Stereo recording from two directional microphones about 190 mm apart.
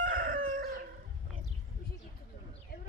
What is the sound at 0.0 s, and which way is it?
Chicken, 45° right (ahead or behind).